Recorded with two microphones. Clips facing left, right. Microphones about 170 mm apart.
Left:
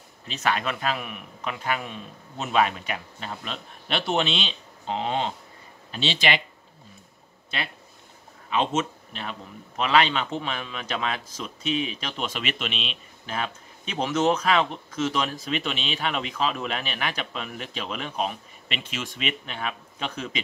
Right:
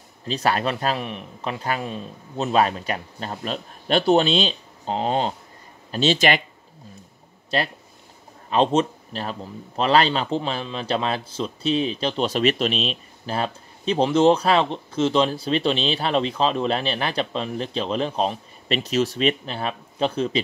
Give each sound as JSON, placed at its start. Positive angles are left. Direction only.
{"t": 0.3, "sound": "a man's voice", "side_deg": -35}
{"t": 8.5, "sound": "a man's voice", "side_deg": -35}